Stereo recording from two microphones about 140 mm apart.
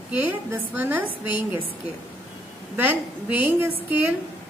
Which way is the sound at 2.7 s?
15° right (ahead or behind).